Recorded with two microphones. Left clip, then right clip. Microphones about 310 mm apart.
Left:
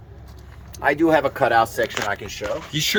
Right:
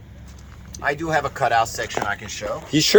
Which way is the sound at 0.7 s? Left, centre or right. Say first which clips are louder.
Left 4 dB; left.